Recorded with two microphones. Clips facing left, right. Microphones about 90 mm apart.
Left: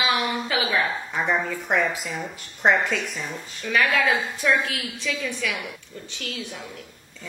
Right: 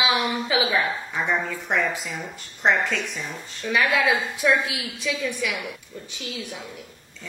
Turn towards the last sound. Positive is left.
turn(degrees=-15)  # may be behind; listen again after turning